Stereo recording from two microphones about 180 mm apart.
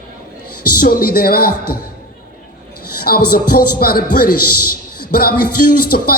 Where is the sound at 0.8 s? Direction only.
55° left (ahead or behind).